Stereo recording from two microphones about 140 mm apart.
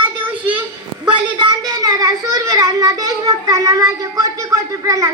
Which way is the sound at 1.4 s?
30° right (ahead or behind).